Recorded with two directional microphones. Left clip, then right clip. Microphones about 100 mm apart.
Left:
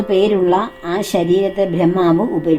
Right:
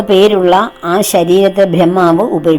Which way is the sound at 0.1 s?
75° right (ahead or behind).